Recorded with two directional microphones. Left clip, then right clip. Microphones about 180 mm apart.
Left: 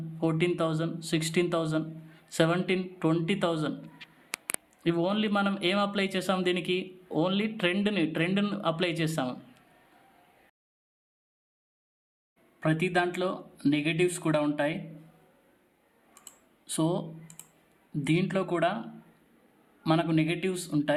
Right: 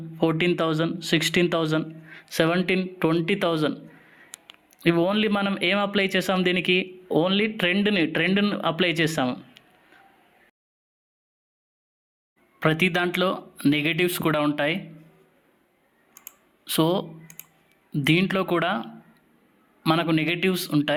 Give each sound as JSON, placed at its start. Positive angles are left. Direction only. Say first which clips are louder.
{"t": 0.2, "sound": "a man's voice", "louder": "right 5 dB", "side_deg": -30}
{"t": 4.8, "sound": "a man's voice", "louder": "right 7 dB", "side_deg": -25}
{"t": 9.2, "sound": "a sound", "louder": "right 7 dB", "side_deg": -20}
{"t": 12.5, "sound": "speech", "louder": "right 5 dB", "side_deg": -35}
{"t": 16.6, "sound": "speech", "louder": "right 7 dB", "side_deg": -35}
{"t": 19.8, "sound": "speech", "louder": "right 4 dB", "side_deg": -30}